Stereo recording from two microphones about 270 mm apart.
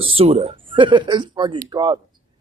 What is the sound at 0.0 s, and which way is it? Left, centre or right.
Speech, right.